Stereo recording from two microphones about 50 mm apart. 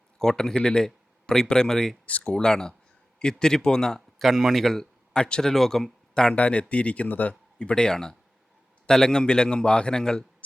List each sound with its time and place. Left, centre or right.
0.2 s speech: centre
2.0 s speech: left
2.3 s a man's voice: centre
4.3 s speech: centre
5.2 s speech: centre
5.5 s speech: centre
6.3 s a man's voice: left